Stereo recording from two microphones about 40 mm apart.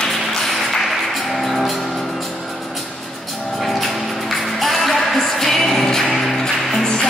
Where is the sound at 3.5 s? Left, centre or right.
Centre.